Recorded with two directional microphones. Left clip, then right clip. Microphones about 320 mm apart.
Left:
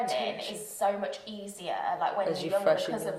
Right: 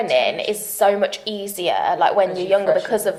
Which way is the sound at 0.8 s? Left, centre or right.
Right.